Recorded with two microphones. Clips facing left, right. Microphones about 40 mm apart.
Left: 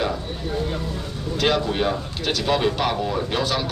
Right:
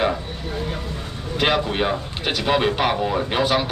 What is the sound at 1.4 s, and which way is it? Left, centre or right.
A man's voice, right.